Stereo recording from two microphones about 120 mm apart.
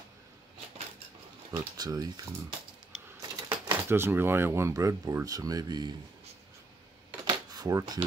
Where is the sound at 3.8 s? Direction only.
20° right (ahead or behind).